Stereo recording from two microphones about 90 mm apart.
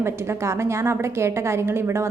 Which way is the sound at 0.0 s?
30° right (ahead or behind).